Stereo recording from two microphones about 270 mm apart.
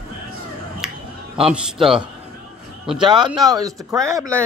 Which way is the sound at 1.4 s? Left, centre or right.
Centre.